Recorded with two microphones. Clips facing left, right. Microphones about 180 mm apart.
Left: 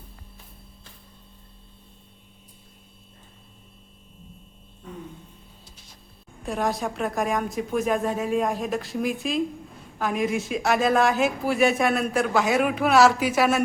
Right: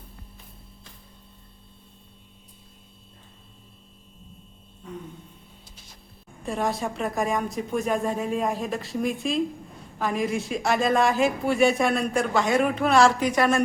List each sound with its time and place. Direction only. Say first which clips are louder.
6.4 s speech: left 1 dB; centre (ahead or behind)